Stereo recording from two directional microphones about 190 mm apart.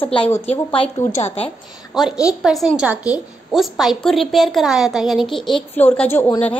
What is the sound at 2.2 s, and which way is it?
A woman's voice, centre (ahead or behind).